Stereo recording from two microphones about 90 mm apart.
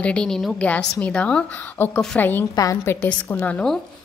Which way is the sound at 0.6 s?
15° left (ahead or behind).